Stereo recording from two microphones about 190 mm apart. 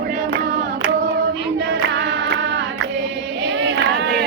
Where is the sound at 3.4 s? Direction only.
65° right (ahead or behind).